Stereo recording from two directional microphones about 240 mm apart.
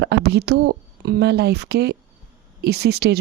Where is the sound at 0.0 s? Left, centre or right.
Right.